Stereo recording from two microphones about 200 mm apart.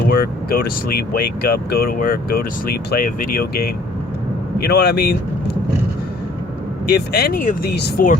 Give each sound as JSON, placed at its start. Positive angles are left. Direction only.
{"t": 0.1, "sound": "speech", "side_deg": 50}
{"t": 6.8, "sound": "speech", "side_deg": 55}